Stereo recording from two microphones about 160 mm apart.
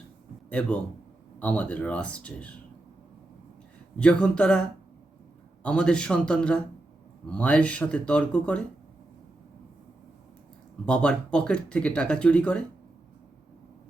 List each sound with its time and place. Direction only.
1.4 s speech: 10° left (ahead or behind)
3.9 s a man's voice: 5° left (ahead or behind)
5.6 s a man's voice: 5° left (ahead or behind)
10.8 s speech: 5° left (ahead or behind)